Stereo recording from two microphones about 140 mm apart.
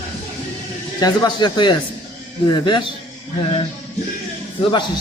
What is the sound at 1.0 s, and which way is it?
A man's voice, 30° left (ahead or behind).